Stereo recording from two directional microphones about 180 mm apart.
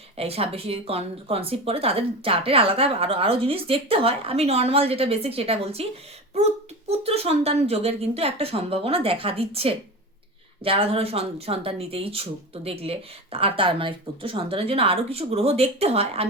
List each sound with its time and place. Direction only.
0.2 s speech: 35° right (ahead or behind)